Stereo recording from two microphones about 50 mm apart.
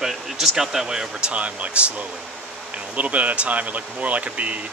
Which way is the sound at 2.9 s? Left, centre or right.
Right.